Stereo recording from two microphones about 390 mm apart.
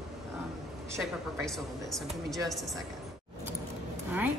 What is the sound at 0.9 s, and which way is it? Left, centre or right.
A woman's voice, centre.